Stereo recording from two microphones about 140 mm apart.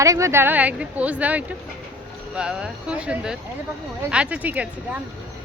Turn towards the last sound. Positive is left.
turn(degrees=-10)  # may be behind; listen again after turning